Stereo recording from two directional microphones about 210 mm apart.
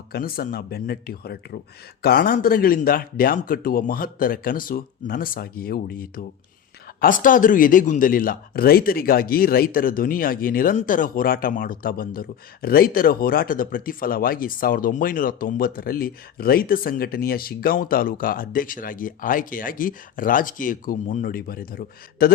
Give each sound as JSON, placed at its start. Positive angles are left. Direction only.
{"t": 0.1, "sound": "speech", "side_deg": 45}